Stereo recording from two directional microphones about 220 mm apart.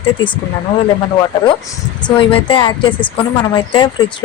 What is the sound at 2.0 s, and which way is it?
A woman's voice, 25° left (ahead or behind).